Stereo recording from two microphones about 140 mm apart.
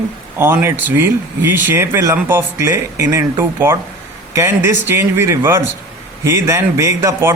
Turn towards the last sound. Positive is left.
turn(degrees=-20)  # may be behind; listen again after turning